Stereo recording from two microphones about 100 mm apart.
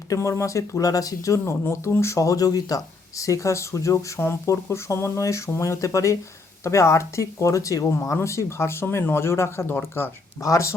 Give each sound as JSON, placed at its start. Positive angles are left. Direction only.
{"t": 0.1, "sound": "speech", "side_deg": 30}
{"t": 10.4, "sound": "speech", "side_deg": 30}